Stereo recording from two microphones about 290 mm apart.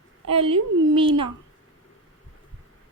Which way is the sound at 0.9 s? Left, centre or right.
Centre.